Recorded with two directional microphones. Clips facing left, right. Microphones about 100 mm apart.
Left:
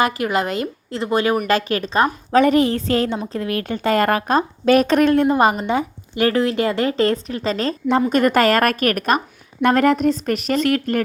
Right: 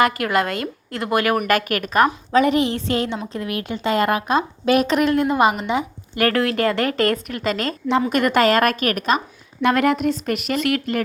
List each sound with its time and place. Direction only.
0.0 s speech: 20° left (ahead or behind)
2.3 s a woman's voice: 40° left (ahead or behind)
6.4 s a woman's voice: 20° left (ahead or behind); by 11.0 s 40° left (ahead or behind)